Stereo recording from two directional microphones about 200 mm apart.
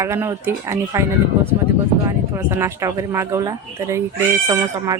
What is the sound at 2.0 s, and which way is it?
A woman's voice, 15° right (ahead or behind).